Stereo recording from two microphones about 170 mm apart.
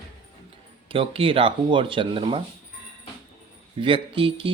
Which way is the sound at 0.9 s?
30° right (ahead or behind).